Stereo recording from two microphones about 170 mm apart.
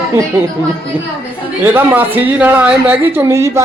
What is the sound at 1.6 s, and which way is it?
Speech, 10° right (ahead or behind).